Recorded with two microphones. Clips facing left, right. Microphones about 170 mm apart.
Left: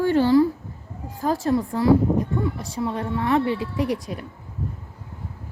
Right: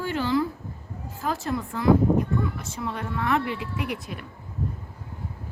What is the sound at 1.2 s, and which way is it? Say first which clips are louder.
Speech: left 7 dB; 35° left (ahead or behind).